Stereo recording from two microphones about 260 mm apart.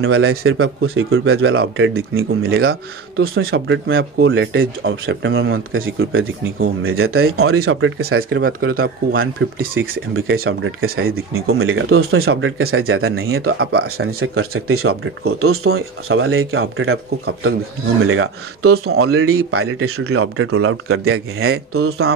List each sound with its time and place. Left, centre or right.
0.0 s speech: right
8.7 s speech: right
9.2 s speech: right
9.8 s speech: right